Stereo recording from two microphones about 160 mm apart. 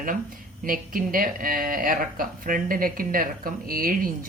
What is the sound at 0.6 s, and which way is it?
Speech, 60° right (ahead or behind).